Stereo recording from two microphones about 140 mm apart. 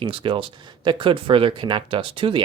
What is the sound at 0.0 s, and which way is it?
Speech, 40° right (ahead or behind).